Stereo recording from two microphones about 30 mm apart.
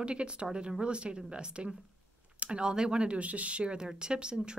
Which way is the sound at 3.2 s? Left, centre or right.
Right.